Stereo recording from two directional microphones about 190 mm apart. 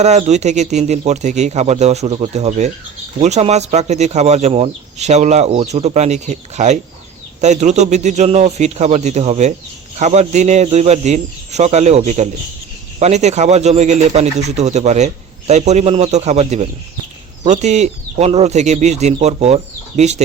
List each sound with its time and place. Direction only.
0.0 s speech: 35° right (ahead or behind)